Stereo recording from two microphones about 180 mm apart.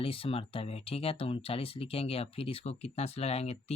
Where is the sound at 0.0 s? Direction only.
30° left (ahead or behind).